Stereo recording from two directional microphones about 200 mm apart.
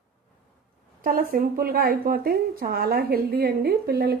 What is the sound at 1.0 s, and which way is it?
Speech, 45° right (ahead or behind).